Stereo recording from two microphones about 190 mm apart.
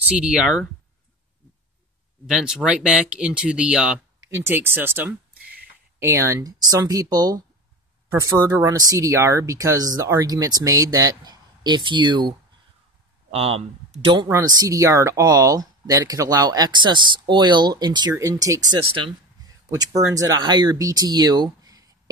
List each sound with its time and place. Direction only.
0.1 s speech: 5° right (ahead or behind)
2.2 s speech: 5° right (ahead or behind); by 22.1 s 20° right (ahead or behind)